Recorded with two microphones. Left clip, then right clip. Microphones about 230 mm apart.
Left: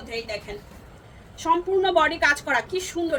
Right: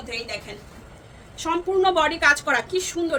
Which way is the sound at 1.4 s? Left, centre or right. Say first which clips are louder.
Even; centre.